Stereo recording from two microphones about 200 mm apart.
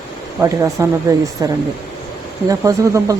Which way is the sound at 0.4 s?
15° right (ahead or behind).